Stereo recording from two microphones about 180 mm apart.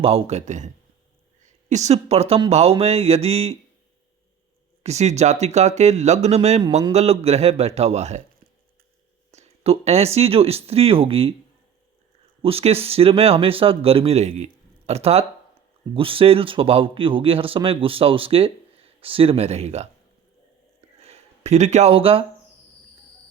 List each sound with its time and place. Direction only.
0.0 s speech: 35° right (ahead or behind)
1.7 s speech: 40° right (ahead or behind)
4.8 s speech: 40° right (ahead or behind)
9.3 s speech: 35° right (ahead or behind)
12.4 s speech: 35° right (ahead or behind)
21.0 s a sound: 35° right (ahead or behind)